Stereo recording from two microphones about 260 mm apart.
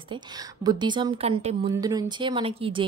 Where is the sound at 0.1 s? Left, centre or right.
Centre.